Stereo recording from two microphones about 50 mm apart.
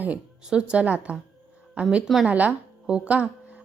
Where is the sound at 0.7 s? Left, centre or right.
Right.